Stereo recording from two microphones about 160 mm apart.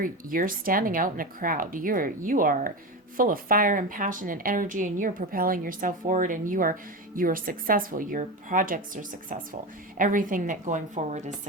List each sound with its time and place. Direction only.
0.0 s a woman's voice: 60° right (ahead or behind)